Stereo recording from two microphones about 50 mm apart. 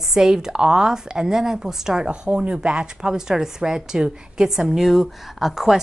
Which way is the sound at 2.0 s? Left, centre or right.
Right.